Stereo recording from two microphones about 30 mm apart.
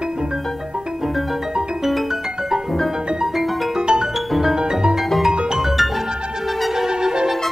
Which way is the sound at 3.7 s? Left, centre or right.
Right.